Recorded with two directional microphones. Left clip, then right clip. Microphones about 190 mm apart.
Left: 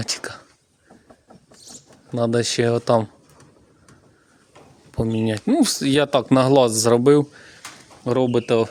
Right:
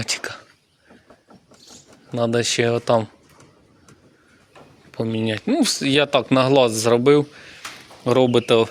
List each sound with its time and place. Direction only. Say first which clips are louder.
0.0 s speech: right 2 dB; 25° left (ahead or behind)
2.1 s speech: right 1 dB; 25° left (ahead or behind)
4.9 s speech: even; 25° left (ahead or behind)
8.0 s speech: right 3 dB; 10° left (ahead or behind)